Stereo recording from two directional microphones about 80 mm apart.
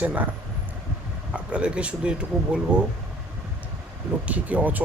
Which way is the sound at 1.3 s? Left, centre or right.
Centre.